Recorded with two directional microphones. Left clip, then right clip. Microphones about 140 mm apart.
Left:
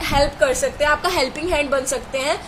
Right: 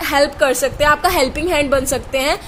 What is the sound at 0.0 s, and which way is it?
A woman's voice, 90° right.